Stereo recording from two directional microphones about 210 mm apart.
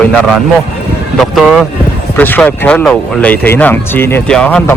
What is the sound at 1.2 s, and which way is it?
Speech, centre (ahead or behind).